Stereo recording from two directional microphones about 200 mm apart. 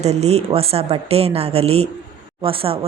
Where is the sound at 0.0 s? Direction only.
35° right (ahead or behind).